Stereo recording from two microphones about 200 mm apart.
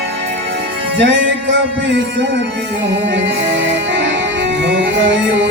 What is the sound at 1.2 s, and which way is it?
Music, 70° right (ahead or behind).